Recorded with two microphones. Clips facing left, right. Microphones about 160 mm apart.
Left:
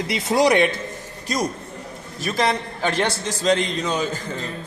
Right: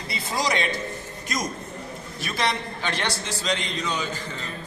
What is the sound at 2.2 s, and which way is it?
A man's voice, 40° left (ahead or behind).